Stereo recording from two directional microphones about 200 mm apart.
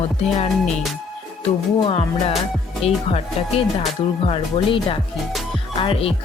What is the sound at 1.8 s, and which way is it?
Speech, 30° left (ahead or behind).